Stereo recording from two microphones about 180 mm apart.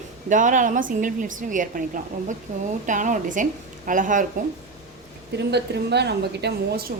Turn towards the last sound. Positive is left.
turn(degrees=-65)  # may be behind; listen again after turning